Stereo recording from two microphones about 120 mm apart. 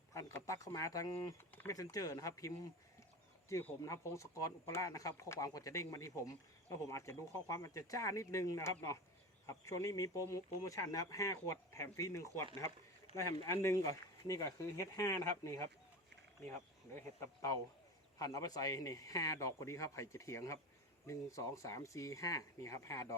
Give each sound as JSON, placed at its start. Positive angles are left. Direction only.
{"t": 0.1, "sound": "speech", "side_deg": 25}
{"t": 3.5, "sound": "speech", "side_deg": 25}
{"t": 13.5, "sound": "speech", "side_deg": 25}